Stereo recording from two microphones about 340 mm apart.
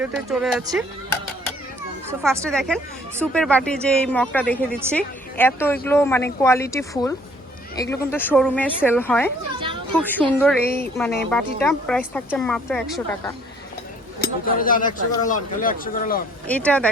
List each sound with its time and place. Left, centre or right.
0.0 s speech: centre
2.2 s speech: centre
14.4 s a man's voice: left
16.5 s speech: centre